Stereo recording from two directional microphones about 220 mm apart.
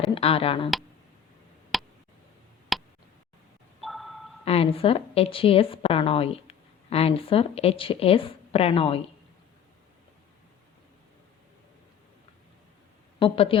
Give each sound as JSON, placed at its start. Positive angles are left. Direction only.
{"t": 0.0, "sound": "speech", "side_deg": 25}
{"t": 1.7, "sound": "tick", "side_deg": 0}
{"t": 2.7, "sound": "a sound", "side_deg": 0}
{"t": 4.4, "sound": "a woman's voice", "side_deg": 25}
{"t": 13.1, "sound": "a woman's voice", "side_deg": 25}